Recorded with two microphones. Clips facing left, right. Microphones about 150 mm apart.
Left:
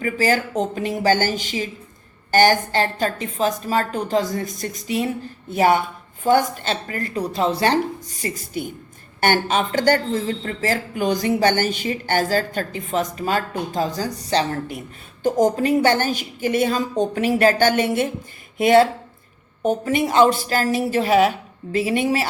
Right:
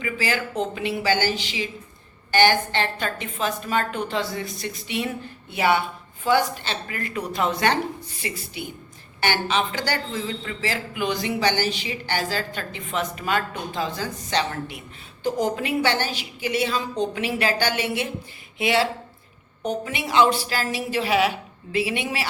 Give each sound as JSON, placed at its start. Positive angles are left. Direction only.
{"t": 0.0, "sound": "a woman's voice", "side_deg": 40}